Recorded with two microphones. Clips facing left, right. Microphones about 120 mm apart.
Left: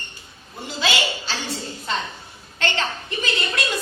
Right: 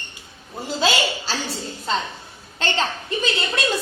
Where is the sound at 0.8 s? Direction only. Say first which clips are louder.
Right 3 dB; 35° right (ahead or behind).